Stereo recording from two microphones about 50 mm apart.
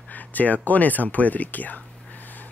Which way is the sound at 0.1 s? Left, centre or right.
Left.